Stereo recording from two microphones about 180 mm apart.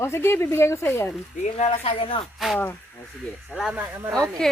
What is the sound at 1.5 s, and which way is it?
Speech, 35° left (ahead or behind).